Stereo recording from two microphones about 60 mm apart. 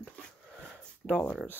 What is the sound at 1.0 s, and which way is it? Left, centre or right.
Speech, left.